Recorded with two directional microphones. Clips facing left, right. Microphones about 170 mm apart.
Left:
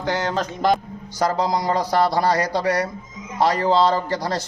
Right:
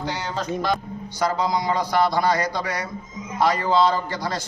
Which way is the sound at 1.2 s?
40° left (ahead or behind).